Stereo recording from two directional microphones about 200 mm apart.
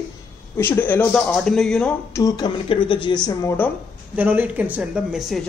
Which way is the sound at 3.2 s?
10° left (ahead or behind).